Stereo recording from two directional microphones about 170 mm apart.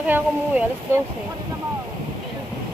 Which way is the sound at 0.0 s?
10° right (ahead or behind).